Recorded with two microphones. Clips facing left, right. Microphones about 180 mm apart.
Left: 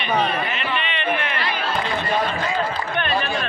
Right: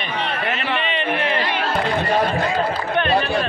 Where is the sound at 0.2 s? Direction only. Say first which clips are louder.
Left 1 dB; 70° right (ahead or behind).